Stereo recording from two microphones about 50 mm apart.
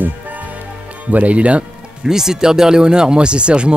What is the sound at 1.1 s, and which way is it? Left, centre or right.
Speech, right.